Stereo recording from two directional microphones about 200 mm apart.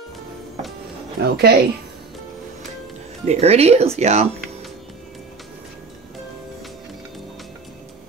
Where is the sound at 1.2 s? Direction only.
50° right (ahead or behind).